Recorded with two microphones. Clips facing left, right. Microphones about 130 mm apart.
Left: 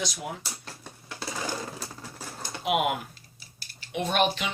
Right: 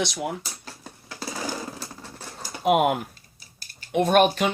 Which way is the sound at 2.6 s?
45° right (ahead or behind).